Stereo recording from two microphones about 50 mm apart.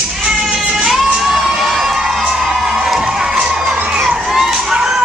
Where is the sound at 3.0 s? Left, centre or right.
Centre.